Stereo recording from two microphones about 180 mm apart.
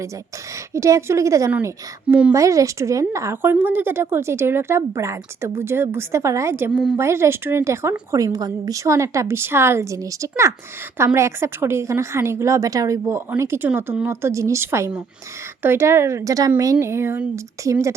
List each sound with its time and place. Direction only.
0.7 s a woman's voice: 15° right (ahead or behind)